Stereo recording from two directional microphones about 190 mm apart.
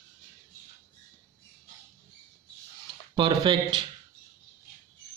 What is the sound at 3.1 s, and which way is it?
Speech, 25° right (ahead or behind).